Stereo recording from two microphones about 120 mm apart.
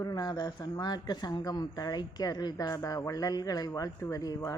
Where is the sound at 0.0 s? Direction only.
35° left (ahead or behind).